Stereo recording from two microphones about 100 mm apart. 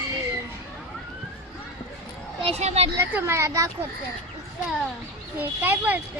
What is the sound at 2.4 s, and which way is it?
Speech, 80° right.